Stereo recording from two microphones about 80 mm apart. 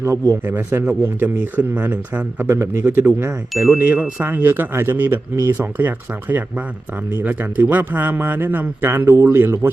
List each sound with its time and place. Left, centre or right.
0.0 s speech: right